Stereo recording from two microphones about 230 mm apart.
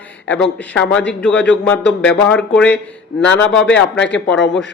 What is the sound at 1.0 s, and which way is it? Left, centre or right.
Speech, left.